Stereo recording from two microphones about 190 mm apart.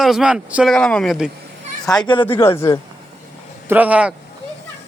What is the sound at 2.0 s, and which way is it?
Speech, 25° left (ahead or behind).